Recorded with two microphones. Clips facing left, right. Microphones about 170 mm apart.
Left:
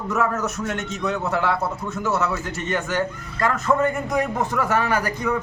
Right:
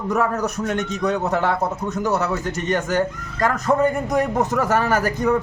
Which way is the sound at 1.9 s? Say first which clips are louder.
Right 2 dB; 40° right (ahead or behind).